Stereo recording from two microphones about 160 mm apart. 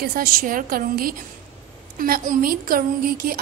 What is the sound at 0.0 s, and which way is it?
A woman's voice, 65° right (ahead or behind).